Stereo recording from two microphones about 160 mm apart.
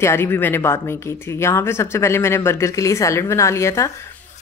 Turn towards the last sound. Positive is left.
turn(degrees=15)  # may be behind; listen again after turning